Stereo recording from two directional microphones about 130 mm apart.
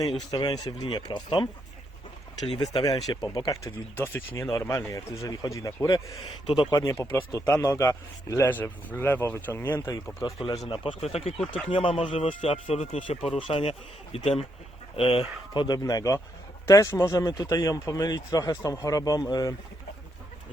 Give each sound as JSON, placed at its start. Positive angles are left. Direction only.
{"t": 0.3, "sound": "speech", "side_deg": 30}
{"t": 3.2, "sound": "a man's voice", "side_deg": 25}
{"t": 6.1, "sound": "speech", "side_deg": 45}
{"t": 6.7, "sound": "a man's voice", "side_deg": 25}
{"t": 10.7, "sound": "speech", "side_deg": 45}
{"t": 11.3, "sound": "speech", "side_deg": 5}
{"t": 11.7, "sound": "speech", "side_deg": 40}
{"t": 15.6, "sound": "a man's voice", "side_deg": 30}